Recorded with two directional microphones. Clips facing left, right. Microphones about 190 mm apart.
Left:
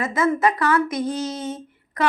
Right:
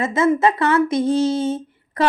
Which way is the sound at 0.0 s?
25° right (ahead or behind).